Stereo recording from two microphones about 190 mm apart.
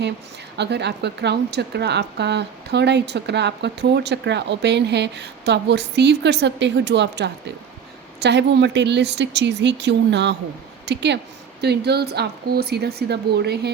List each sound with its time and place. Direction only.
0.5 s speech: 65° right (ahead or behind)